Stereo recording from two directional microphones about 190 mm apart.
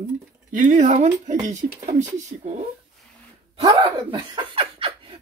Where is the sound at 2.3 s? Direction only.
45° right (ahead or behind).